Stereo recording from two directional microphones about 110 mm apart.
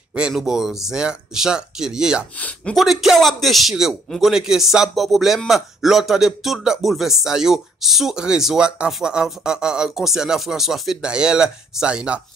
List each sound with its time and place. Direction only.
0.1 s speech: 5° right (ahead or behind)
2.3 s speech: 15° left (ahead or behind)
2.7 s speech: centre (ahead or behind)